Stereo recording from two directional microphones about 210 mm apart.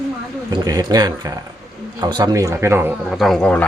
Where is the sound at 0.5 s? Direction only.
20° right (ahead or behind).